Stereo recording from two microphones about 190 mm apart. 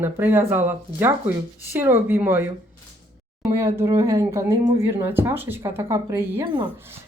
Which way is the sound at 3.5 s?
15° right (ahead or behind).